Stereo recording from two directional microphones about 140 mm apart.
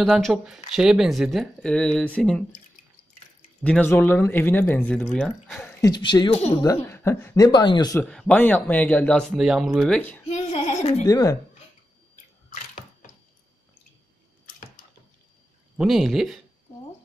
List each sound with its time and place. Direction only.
0.0 s speech: centre (ahead or behind)
3.6 s speech: 10° left (ahead or behind)
5.6 s a sound: 15° left (ahead or behind)
5.9 s speech: 30° left (ahead or behind)
6.6 s speech: 20° left (ahead or behind)
8.0 s speech: 5° left (ahead or behind)
9.4 s speech: 5° right (ahead or behind)
9.9 s speech: 10° left (ahead or behind)
10.2 s female singing: 50° left (ahead or behind)
11.1 s speech: 25° left (ahead or behind)
15.8 s speech: centre (ahead or behind)